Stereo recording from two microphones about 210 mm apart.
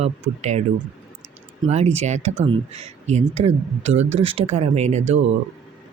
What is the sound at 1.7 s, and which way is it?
Speech, 30° right (ahead or behind).